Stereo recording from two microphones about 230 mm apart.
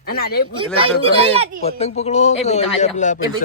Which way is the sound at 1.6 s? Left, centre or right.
Left.